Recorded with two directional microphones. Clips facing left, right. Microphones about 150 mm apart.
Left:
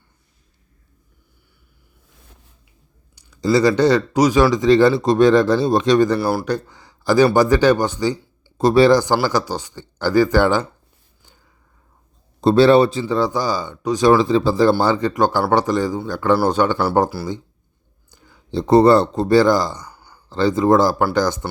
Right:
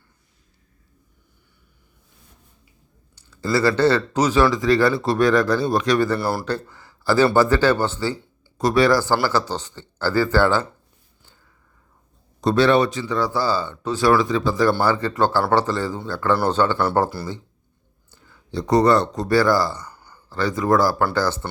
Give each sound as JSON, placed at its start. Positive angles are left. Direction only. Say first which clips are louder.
{"t": 3.5, "sound": "speech", "louder": "left 3 dB", "side_deg": 15}
{"t": 6.1, "sound": "speech", "louder": "left 4 dB", "side_deg": 0}
{"t": 6.4, "sound": "speech", "louder": "left 3 dB", "side_deg": 15}
{"t": 8.5, "sound": "speech", "louder": "left 5 dB", "side_deg": 30}
{"t": 9.2, "sound": "speech", "louder": "left 2 dB", "side_deg": 15}
{"t": 12.4, "sound": "speech", "louder": "left 5 dB", "side_deg": 30}
{"t": 18.1, "sound": "a sound", "louder": "left 2 dB", "side_deg": 15}
{"t": 18.5, "sound": "speech", "louder": "left 5 dB", "side_deg": 25}
{"t": 20.3, "sound": "speech", "louder": "left 5 dB", "side_deg": 25}